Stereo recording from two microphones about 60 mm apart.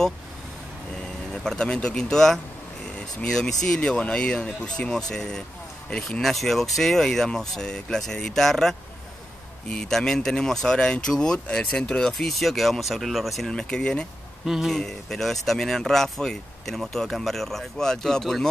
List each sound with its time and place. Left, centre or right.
1.3 s speech: centre
13.5 s speech: centre
14.4 s speech: centre
14.7 s speech: centre